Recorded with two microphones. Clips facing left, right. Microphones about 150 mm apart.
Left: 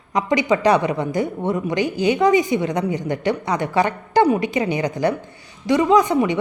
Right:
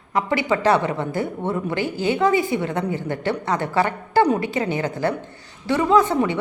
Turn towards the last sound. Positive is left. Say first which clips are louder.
# left 2 dB
turn(degrees=15)  # may be behind; listen again after turning